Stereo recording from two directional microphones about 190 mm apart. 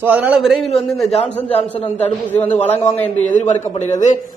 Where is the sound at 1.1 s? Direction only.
35° left (ahead or behind).